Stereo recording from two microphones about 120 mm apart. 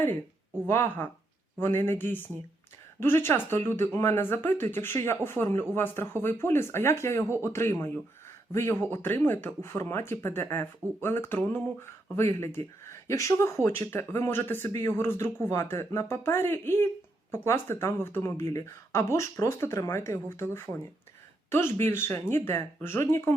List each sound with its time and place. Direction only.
0.7 s speech: 20° left (ahead or behind)